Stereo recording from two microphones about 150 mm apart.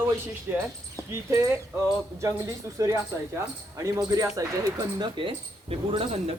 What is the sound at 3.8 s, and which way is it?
Speech, 20° right (ahead or behind).